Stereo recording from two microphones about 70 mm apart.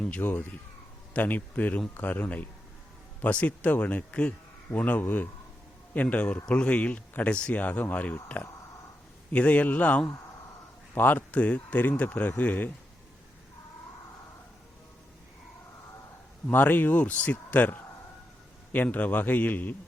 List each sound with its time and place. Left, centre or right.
0.2 s speech: left
1.1 s speech: left
16.5 s speech: left